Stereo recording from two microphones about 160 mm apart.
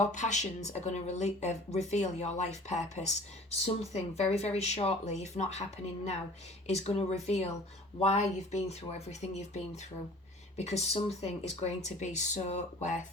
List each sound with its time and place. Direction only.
0.0 s speech: 50° left (ahead or behind)